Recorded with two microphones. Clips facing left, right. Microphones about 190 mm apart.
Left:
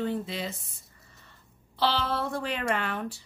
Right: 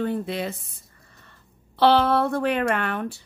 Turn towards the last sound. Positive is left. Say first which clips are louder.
# right 5 dB
turn(degrees=-60)  # may be behind; listen again after turning